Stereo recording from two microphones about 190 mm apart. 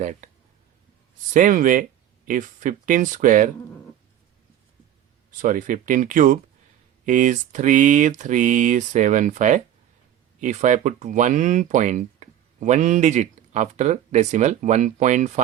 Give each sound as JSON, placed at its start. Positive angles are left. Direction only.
{"t": 0.0, "sound": "speech", "side_deg": -40}
{"t": 1.3, "sound": "speech", "side_deg": -45}
{"t": 5.4, "sound": "speech", "side_deg": -45}